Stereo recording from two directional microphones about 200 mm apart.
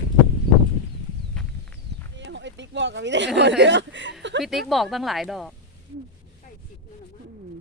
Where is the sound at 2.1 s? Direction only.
65° right (ahead or behind).